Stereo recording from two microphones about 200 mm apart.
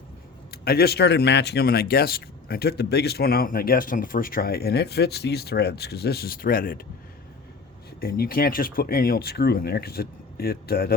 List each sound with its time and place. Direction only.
0.5 s speech: 50° left (ahead or behind)
8.0 s speech: 50° left (ahead or behind)